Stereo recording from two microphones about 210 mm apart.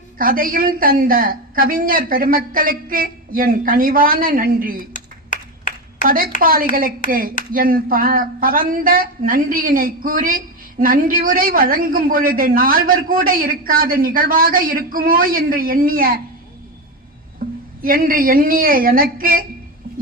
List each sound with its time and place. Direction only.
0.2 s speech: 40° right (ahead or behind)
4.9 s clapping: 40° left (ahead or behind)
6.4 s speech: 45° right (ahead or behind)
17.4 s music: 45° right (ahead or behind)
17.8 s speech: 40° right (ahead or behind)